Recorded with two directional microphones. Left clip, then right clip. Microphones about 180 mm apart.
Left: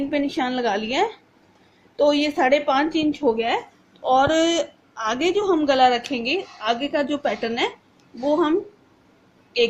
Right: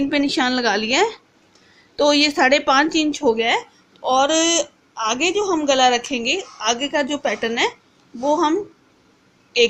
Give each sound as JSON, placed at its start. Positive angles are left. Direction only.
{"t": 0.1, "sound": "a woman's voice", "side_deg": -60}